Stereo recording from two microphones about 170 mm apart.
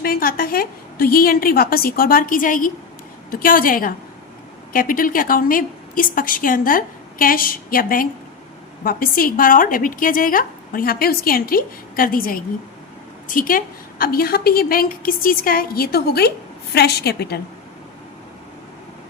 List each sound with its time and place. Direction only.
0.0 s a woman's voice: 60° left (ahead or behind)